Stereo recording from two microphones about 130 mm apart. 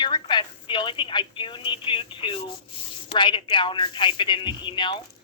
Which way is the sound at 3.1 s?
40° left (ahead or behind).